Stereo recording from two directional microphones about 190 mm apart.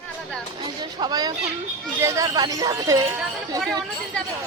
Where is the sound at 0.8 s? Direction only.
20° right (ahead or behind).